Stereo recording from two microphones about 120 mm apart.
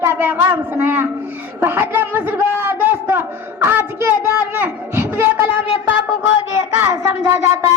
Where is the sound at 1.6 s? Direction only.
20° right (ahead or behind).